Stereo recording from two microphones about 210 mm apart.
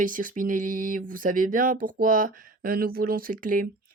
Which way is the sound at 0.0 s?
40° right (ahead or behind).